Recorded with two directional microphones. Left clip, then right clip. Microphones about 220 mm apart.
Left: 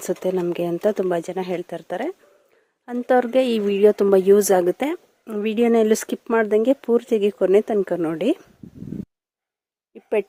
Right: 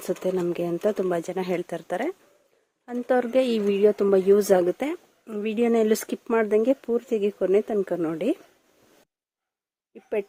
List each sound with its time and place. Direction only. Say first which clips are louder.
0.0 s speech: left 3 dB; 10° left (ahead or behind)
2.8 s speech: left 5 dB; 15° left (ahead or behind)
9.9 s a sound: left 6 dB; 20° left (ahead or behind)